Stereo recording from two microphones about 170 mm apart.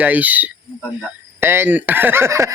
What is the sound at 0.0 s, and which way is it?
Speech, 10° right (ahead or behind).